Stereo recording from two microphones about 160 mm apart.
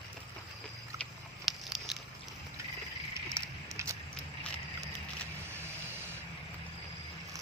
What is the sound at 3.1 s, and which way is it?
Bicycle, 15° right (ahead or behind).